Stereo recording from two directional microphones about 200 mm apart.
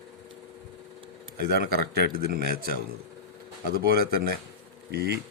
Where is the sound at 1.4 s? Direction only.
50° right (ahead or behind).